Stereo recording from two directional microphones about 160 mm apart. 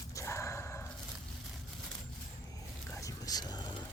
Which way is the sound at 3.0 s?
20° left (ahead or behind).